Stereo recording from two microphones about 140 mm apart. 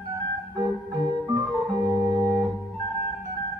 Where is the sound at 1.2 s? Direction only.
25° right (ahead or behind).